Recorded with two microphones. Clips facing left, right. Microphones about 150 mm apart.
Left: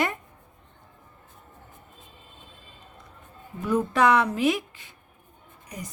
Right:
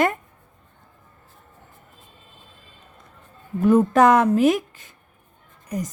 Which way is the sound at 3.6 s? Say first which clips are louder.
Right 7 dB; 45° right (ahead or behind).